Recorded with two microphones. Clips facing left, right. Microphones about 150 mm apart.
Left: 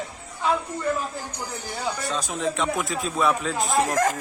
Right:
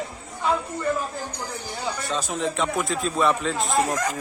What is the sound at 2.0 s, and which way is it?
Speech, centre (ahead or behind).